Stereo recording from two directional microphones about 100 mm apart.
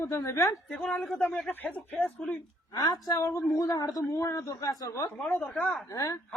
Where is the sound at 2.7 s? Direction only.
40° left (ahead or behind).